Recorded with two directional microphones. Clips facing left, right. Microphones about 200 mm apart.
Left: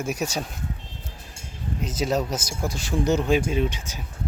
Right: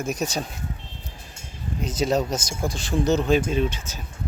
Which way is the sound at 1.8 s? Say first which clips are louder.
Right 2 dB; 5° left (ahead or behind).